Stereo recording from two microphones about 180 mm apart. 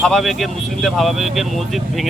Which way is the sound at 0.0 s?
Centre (ahead or behind).